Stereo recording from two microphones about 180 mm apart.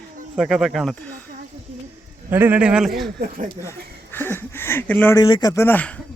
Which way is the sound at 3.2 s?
50° right (ahead or behind).